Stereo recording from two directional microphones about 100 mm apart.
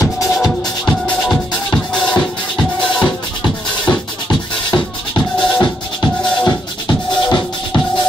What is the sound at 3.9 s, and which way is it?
Music, 45° left (ahead or behind).